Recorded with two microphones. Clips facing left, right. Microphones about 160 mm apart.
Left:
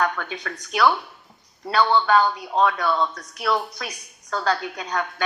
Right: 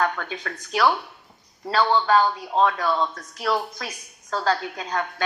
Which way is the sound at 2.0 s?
30° right (ahead or behind).